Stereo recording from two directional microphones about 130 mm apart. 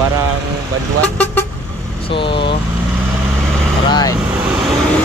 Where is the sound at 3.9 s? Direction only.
30° left (ahead or behind).